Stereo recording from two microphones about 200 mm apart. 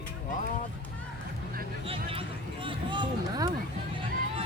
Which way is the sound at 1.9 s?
25° right (ahead or behind).